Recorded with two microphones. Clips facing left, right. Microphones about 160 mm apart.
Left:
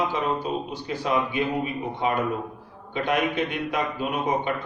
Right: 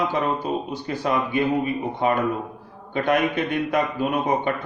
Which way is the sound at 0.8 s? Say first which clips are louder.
Even; 50° right (ahead or behind).